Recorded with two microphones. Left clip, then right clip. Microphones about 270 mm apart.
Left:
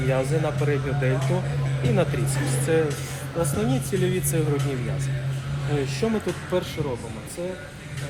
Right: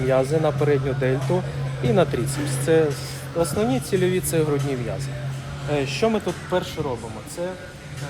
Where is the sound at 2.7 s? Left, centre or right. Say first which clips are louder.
Right 5 dB; right.